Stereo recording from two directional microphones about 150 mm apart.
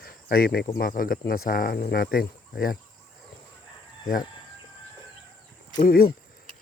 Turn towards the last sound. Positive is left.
turn(degrees=75)  # may be behind; listen again after turning